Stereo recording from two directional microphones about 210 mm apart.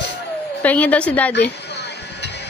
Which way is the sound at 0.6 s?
5° left (ahead or behind).